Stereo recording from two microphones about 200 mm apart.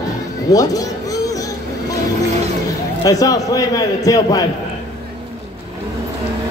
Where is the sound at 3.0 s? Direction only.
20° left (ahead or behind).